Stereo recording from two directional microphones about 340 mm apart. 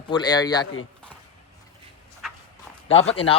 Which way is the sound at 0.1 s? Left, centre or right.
Centre.